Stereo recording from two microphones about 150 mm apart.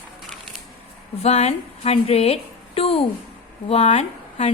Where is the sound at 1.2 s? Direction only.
45° left (ahead or behind).